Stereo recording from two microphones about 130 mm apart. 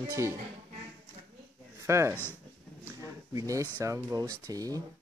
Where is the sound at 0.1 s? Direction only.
20° right (ahead or behind).